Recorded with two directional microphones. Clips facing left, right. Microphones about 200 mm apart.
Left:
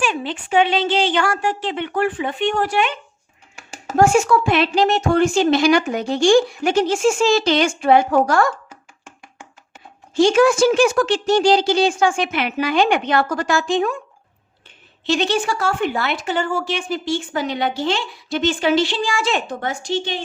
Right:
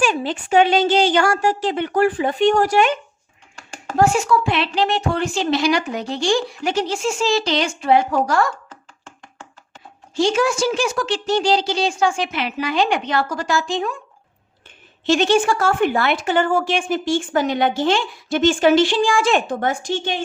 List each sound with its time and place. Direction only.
0.0 s a woman's voice: 40° right (ahead or behind)
3.5 s a sound: 5° left (ahead or behind)
3.9 s a woman's voice: 50° left (ahead or behind)
8.7 s music: 10° left (ahead or behind)
10.2 s a woman's voice: 55° left (ahead or behind)
15.0 s speech: 50° right (ahead or behind)